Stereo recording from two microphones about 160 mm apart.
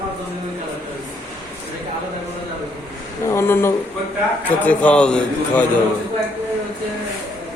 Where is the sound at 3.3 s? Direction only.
15° left (ahead or behind).